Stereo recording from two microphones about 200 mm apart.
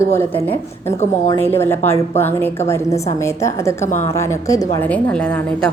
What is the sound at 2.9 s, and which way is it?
Speech, 35° left (ahead or behind).